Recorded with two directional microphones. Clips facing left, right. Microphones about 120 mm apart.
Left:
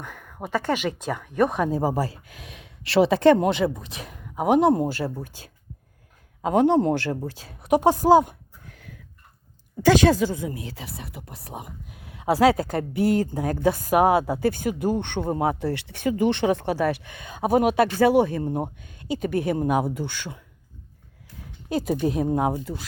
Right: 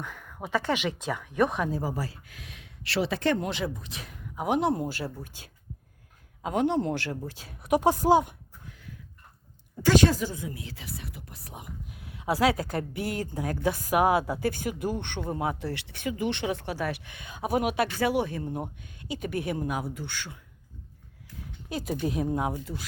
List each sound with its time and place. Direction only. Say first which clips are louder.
0.0 s a sound: even; 50° left (ahead or behind)
0.4 s speech: left 3 dB; 45° left (ahead or behind)
2.0 s speech: left 8 dB; 90° left; by 8.4 s 35° left (ahead or behind)
8.6 s a sound: left 1 dB; 60° left (ahead or behind)
9.8 s speech: left 5 dB; 90° left; by 11.7 s 45° left (ahead or behind)
12.2 s speech: left 6 dB; 35° left (ahead or behind)
19.6 s speech: left 9 dB; 60° left (ahead or behind); by 20.3 s 75° left (ahead or behind)
22.0 s speech: left 4 dB; 35° left (ahead or behind)